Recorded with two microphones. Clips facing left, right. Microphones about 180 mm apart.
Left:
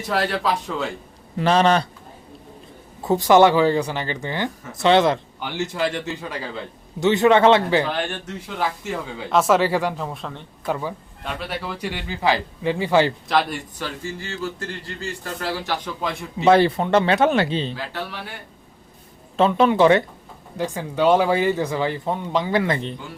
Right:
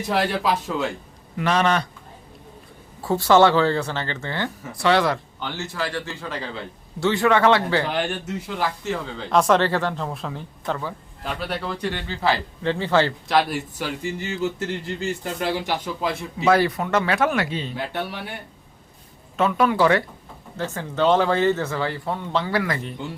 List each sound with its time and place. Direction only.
0.1 s a man's voice: 15° right (ahead or behind)
1.4 s speech: 30° left (ahead or behind)
3.0 s speech: 15° left (ahead or behind)
7.9 s a man's voice: 5° right (ahead or behind)
8.8 s speech: 10° left (ahead or behind)
10.7 s speech: 15° left (ahead or behind)
11.2 s speech: centre (ahead or behind)
13.2 s a man's voice: centre (ahead or behind)
16.0 s a man's voice: centre (ahead or behind)
16.5 s speech: 25° left (ahead or behind)
19.4 s speech: 25° left (ahead or behind)